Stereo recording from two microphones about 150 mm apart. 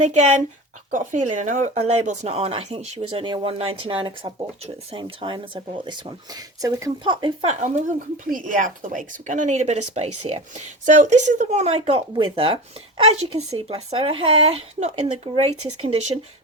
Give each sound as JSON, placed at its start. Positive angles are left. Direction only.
{"t": 0.0, "sound": "speech", "side_deg": -50}
{"t": 7.4, "sound": "speech", "side_deg": -55}